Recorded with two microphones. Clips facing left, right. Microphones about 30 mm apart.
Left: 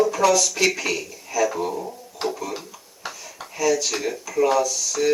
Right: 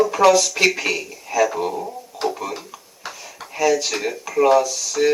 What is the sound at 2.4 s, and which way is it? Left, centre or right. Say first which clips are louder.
Speech: right 2 dB; right.